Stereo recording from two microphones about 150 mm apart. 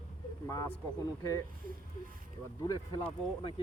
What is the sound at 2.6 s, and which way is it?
Speech, 25° left (ahead or behind).